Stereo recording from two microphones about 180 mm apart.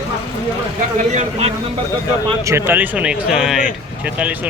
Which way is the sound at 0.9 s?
40° right (ahead or behind).